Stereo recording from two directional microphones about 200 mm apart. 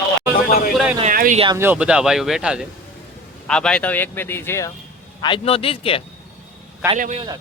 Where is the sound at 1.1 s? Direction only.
45° right (ahead or behind).